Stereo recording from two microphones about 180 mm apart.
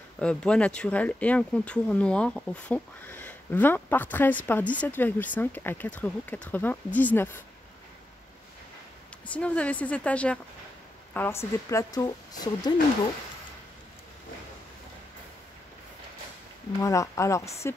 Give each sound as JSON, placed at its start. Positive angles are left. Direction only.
{"t": 0.2, "sound": "speech", "side_deg": 5}
{"t": 9.2, "sound": "speech", "side_deg": 5}
{"t": 16.8, "sound": "speech", "side_deg": 15}